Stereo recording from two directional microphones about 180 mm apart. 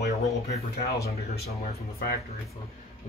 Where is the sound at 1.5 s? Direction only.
35° left (ahead or behind).